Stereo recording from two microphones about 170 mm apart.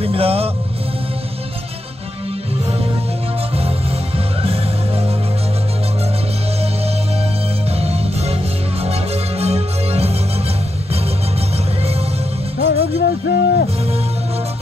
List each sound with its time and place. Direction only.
0.0 s music: 35° right (ahead or behind)
4.4 s music: 35° right (ahead or behind)
7.7 s music: 35° right (ahead or behind)
12.5 s music: 80° left